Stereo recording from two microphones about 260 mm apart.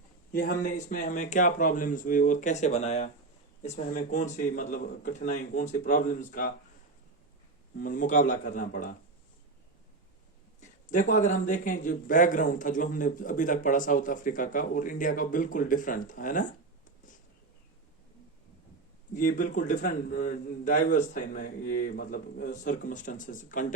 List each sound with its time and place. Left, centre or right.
0.3 s speech: left
7.8 s speech: left
10.6 s speech: left
19.1 s speech: left